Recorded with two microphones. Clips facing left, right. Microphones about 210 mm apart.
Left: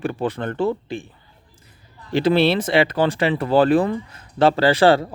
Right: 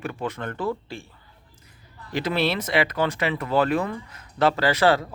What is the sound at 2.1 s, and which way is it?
Speech, 30° left (ahead or behind).